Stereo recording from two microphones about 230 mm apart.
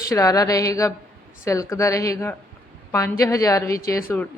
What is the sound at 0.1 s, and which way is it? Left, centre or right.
A woman's voice, centre.